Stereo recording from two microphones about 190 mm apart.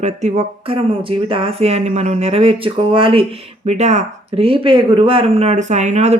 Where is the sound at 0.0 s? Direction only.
35° right (ahead or behind).